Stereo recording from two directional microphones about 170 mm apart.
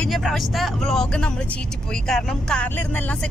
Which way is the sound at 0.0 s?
Centre (ahead or behind).